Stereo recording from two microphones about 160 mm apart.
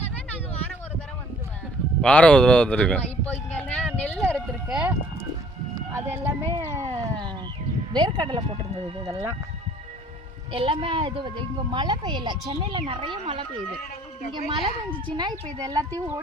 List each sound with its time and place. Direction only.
2.0 s speech: 5° left (ahead or behind)
3.8 s a sound: 10° left (ahead or behind)
4.7 s speech: 10° right (ahead or behind)
5.9 s a sound: 15° right (ahead or behind)
7.9 s speech: 30° right (ahead or behind)
10.5 s a woman's voice: 35° right (ahead or behind)